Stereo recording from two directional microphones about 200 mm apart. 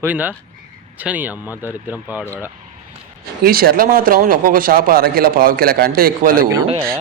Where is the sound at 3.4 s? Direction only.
50° right (ahead or behind).